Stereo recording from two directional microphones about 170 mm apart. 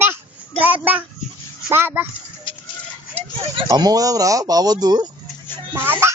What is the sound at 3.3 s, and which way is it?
Speech, 30° right (ahead or behind).